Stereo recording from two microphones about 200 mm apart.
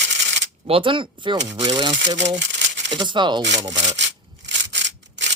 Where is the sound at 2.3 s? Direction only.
60° right (ahead or behind).